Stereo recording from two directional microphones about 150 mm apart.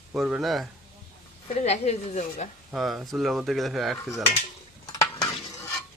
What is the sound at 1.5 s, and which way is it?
Speech, 45° left (ahead or behind).